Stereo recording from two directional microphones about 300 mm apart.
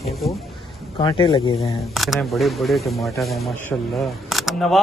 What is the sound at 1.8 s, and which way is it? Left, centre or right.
Speech, centre.